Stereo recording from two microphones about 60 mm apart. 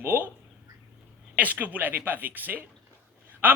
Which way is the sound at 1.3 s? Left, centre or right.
Right.